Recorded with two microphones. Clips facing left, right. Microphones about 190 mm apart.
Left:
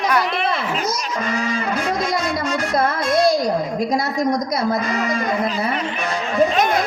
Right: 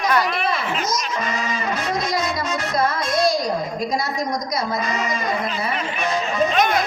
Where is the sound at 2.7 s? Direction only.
55° left (ahead or behind).